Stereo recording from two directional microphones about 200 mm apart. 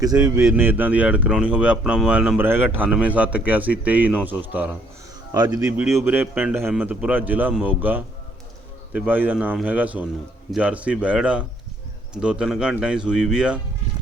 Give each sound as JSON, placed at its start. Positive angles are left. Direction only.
{"t": 0.0, "sound": "speech", "side_deg": -20}